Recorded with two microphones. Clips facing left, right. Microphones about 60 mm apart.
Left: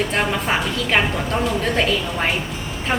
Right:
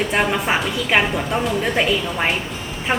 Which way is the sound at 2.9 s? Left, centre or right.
Centre.